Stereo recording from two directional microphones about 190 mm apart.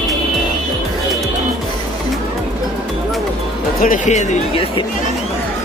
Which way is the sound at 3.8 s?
40° left (ahead or behind).